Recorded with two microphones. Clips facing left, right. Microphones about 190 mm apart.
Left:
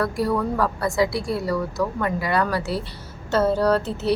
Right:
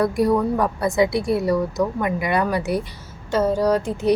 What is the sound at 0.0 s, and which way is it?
A woman's voice, 20° right (ahead or behind).